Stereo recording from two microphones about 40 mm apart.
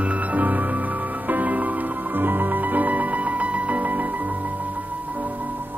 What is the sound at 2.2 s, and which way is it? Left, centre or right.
Music, right.